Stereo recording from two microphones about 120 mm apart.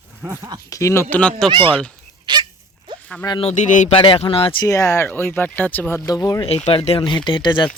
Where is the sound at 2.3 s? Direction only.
40° right (ahead or behind).